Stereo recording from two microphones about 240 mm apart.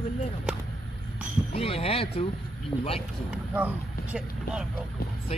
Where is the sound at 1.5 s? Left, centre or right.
Left.